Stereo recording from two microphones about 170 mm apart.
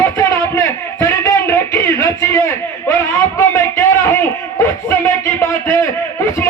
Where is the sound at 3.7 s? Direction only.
15° left (ahead or behind).